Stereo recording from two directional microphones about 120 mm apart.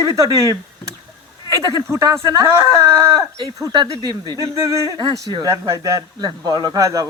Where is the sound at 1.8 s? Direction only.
25° right (ahead or behind).